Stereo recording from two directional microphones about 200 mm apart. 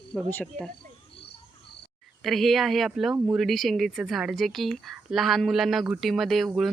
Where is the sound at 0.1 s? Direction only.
5° left (ahead or behind).